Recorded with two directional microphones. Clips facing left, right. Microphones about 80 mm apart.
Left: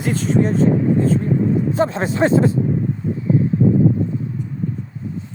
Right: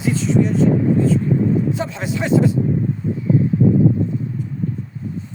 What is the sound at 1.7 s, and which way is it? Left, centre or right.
Speech, left.